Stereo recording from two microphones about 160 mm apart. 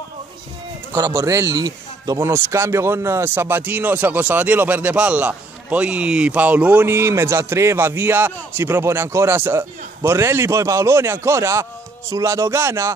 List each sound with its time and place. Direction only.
0.9 s a man's voice: 20° right (ahead or behind)